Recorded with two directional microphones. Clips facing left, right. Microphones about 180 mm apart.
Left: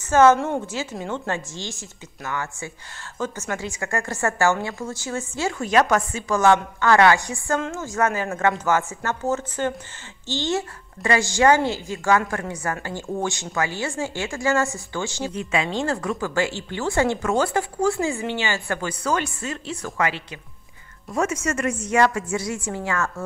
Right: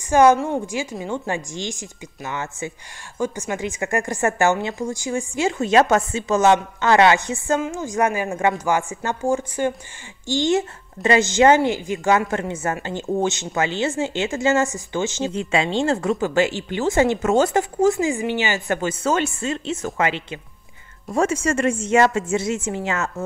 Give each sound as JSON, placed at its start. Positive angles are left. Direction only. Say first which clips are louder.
{"t": 0.1, "sound": "a woman's voice", "louder": "right 1 dB", "side_deg": -15}